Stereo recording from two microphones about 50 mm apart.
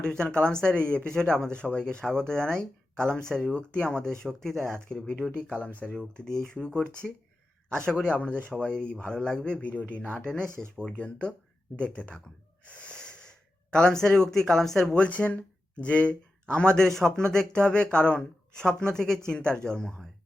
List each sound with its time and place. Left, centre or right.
0.0 s speech: centre
5.0 s speech: left
6.0 s speech: centre
8.1 s speech: left
10.4 s speech: right
10.8 s speech: left
12.6 s gasp: left; by 14.9 s centre
14.9 s speech: left